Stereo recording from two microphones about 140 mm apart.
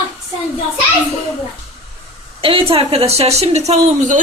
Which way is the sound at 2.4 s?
40° right (ahead or behind).